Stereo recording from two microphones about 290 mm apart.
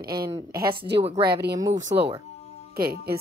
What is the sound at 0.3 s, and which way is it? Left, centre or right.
Speech, centre.